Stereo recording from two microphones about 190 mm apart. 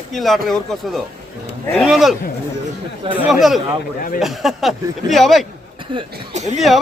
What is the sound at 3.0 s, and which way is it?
Speech, 25° right (ahead or behind).